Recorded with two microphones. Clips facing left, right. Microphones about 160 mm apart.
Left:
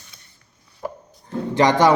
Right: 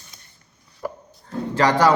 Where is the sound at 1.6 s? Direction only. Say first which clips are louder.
Left 2 dB; 20° left (ahead or behind).